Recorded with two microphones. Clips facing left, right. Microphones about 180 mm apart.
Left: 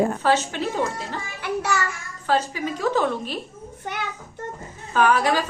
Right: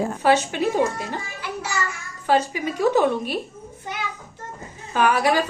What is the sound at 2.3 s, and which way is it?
A woman's voice, 15° right (ahead or behind).